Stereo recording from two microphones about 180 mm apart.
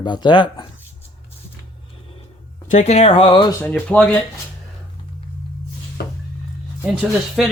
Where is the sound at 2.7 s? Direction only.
35° left (ahead or behind).